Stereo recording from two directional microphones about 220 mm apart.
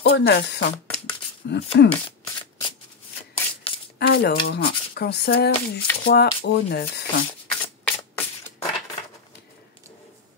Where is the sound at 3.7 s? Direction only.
25° left (ahead or behind).